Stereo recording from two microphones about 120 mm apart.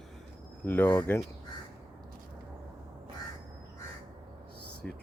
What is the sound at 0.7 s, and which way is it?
Speech, 15° left (ahead or behind).